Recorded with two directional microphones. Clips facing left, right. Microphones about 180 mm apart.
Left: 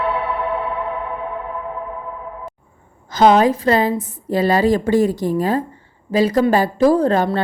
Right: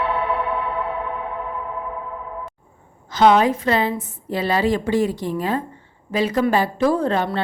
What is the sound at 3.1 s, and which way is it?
A woman's voice, 40° left (ahead or behind).